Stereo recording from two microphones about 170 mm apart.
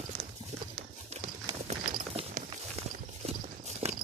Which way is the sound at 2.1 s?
35° right (ahead or behind).